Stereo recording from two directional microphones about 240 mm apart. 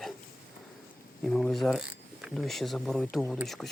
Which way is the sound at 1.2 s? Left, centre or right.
Centre.